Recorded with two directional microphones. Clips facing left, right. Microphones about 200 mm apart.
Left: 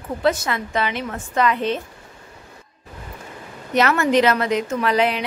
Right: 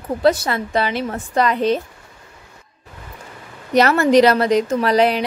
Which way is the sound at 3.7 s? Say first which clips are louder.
Right 4 dB; 35° right (ahead or behind).